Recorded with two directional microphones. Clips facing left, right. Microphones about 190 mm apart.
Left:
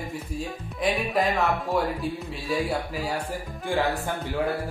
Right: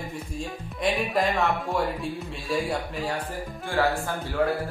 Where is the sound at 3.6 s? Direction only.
20° left (ahead or behind).